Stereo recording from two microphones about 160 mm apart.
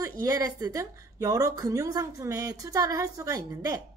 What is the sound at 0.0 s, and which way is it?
A woman's voice, 20° right (ahead or behind).